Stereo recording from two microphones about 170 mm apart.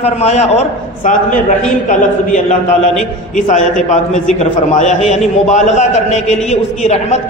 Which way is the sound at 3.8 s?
45° left (ahead or behind).